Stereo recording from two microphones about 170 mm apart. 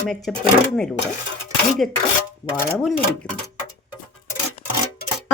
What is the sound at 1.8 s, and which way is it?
Speech, 5° left (ahead or behind).